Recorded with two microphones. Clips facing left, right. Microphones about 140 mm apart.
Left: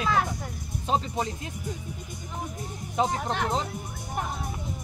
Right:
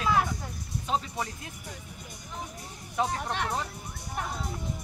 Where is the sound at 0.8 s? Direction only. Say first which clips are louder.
Left 4 dB; 25° left (ahead or behind).